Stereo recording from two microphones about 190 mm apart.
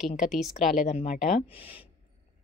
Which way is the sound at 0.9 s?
35° left (ahead or behind).